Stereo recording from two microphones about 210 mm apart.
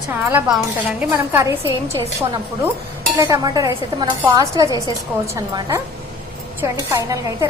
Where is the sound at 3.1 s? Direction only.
15° right (ahead or behind).